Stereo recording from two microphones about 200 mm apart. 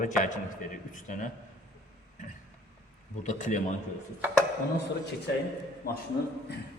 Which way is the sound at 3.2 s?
35° left (ahead or behind).